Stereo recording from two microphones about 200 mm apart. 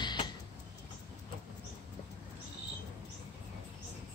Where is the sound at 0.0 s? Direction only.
20° left (ahead or behind).